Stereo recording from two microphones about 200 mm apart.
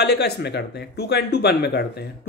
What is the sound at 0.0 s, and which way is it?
Speech, 55° left (ahead or behind).